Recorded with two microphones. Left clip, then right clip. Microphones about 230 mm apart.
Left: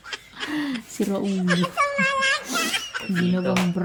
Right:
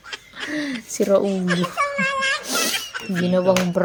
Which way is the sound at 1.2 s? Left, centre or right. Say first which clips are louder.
Right 2 dB; centre.